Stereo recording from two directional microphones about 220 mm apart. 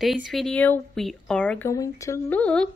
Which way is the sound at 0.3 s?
Centre (ahead or behind).